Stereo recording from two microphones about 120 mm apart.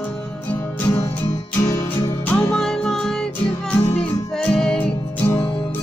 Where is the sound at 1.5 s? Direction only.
25° left (ahead or behind).